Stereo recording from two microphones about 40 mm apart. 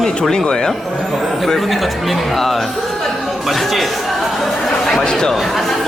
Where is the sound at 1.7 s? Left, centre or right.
Centre.